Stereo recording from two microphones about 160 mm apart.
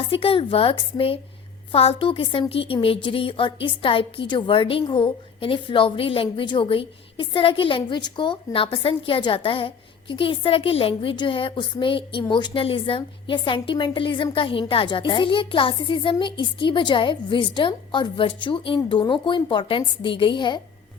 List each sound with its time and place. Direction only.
0.1 s a woman's voice: 35° left (ahead or behind)